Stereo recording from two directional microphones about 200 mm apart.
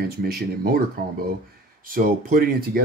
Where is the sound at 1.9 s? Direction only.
45° right (ahead or behind).